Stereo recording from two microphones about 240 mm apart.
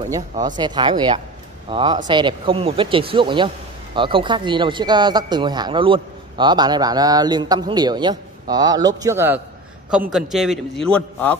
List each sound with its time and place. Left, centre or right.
0.6 s a man's voice: centre